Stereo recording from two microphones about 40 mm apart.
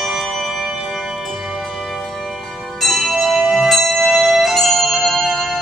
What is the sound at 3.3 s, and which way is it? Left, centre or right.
Music, centre.